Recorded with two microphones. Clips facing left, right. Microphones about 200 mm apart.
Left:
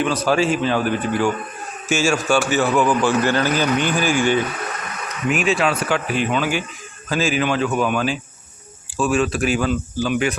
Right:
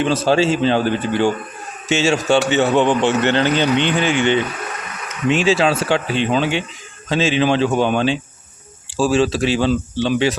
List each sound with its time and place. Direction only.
0.0 s a man's voice: 25° right (ahead or behind)